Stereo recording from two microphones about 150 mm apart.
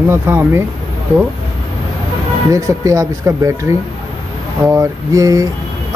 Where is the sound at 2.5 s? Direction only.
20° right (ahead or behind).